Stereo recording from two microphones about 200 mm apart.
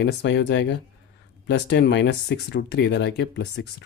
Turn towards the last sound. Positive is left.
turn(degrees=55)  # may be behind; listen again after turning